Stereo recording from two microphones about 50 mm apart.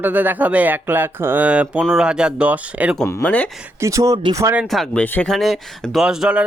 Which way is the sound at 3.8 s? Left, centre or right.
Right.